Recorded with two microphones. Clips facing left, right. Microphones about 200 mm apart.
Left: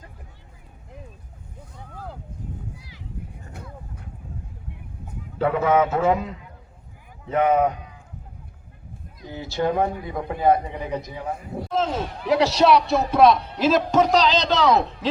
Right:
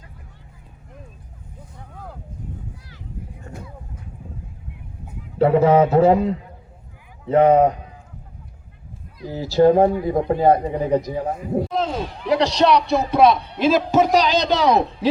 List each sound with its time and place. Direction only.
2.7 s a sound: 10° left (ahead or behind)
5.4 s a man's voice: 30° right (ahead or behind)
9.2 s speech: 35° right (ahead or behind)
11.7 s a man's voice: centre (ahead or behind)